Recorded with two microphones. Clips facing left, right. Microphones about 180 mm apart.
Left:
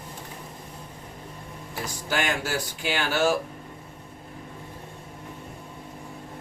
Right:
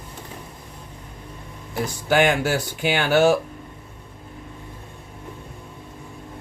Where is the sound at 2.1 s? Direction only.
65° right (ahead or behind).